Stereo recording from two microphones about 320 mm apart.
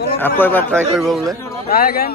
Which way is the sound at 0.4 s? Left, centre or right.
Centre.